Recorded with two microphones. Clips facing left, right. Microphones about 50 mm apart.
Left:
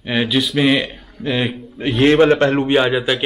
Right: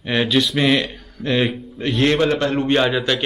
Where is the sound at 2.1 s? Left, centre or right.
Left.